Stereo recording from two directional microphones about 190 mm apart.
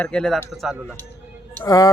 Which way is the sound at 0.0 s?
5° left (ahead or behind).